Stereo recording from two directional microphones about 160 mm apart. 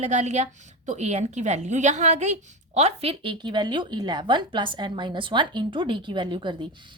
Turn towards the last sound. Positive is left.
turn(degrees=-30)  # may be behind; listen again after turning